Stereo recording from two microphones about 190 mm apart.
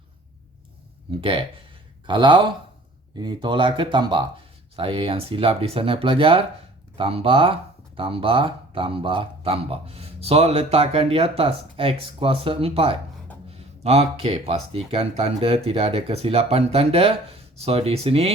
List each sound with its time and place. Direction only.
1.2 s speech: 25° right (ahead or behind)